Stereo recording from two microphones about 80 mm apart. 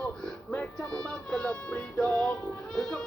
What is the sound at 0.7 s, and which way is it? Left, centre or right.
Music, centre.